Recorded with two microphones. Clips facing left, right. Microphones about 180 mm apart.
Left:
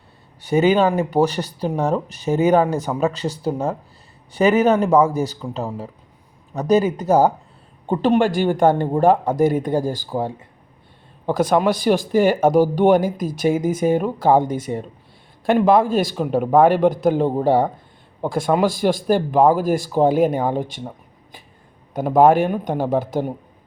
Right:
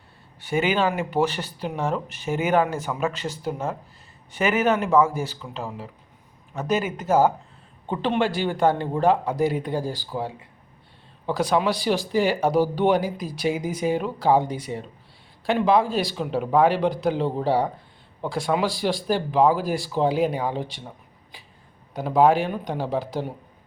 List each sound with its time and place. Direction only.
0.4 s speech: 40° left (ahead or behind)
21.9 s speech: 50° left (ahead or behind)